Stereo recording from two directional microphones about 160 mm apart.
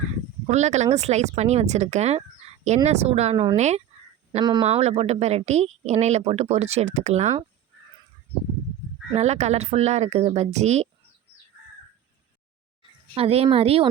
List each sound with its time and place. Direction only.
0.4 s speech: 45° right (ahead or behind)
4.3 s speech: 25° right (ahead or behind)
4.6 s speech: 40° right (ahead or behind)
9.1 s speech: 45° right (ahead or behind)
12.8 s a woman's voice: 40° right (ahead or behind)